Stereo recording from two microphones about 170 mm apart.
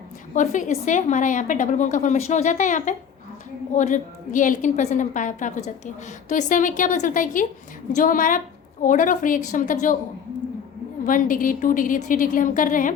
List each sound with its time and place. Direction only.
0.3 s a woman's voice: 45° left (ahead or behind)
11.0 s a woman's voice: 55° left (ahead or behind)